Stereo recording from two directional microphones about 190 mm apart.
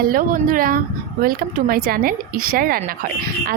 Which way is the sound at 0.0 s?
50° right (ahead or behind).